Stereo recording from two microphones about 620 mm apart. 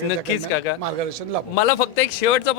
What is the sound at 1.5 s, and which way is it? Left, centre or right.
Speech, left.